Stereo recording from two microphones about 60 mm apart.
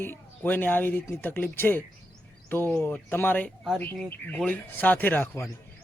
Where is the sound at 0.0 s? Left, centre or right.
Left.